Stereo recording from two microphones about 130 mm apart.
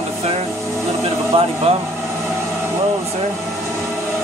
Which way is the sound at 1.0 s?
45° right (ahead or behind).